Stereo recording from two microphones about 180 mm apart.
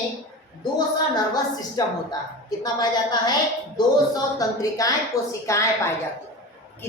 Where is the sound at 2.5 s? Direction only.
20° left (ahead or behind).